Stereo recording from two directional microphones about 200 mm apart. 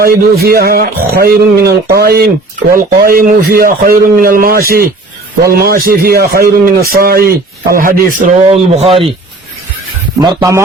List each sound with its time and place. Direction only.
0.0 s a man's voice: 50° right (ahead or behind)
8.4 s speech: 30° right (ahead or behind)
10.2 s speech: 20° right (ahead or behind)